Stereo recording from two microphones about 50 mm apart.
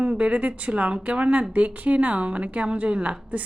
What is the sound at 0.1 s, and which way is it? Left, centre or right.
Speech, right.